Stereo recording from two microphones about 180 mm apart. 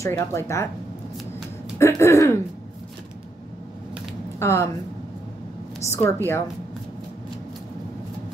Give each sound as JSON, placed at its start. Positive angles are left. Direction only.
{"t": 0.0, "sound": "speech", "side_deg": 15}
{"t": 1.8, "sound": "speech", "side_deg": 15}
{"t": 4.4, "sound": "speech", "side_deg": 15}
{"t": 5.9, "sound": "speech", "side_deg": 15}